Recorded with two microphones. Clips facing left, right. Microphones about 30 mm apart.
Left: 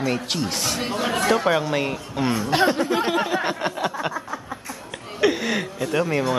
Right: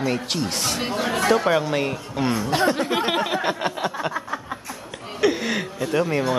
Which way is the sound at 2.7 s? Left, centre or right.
Centre.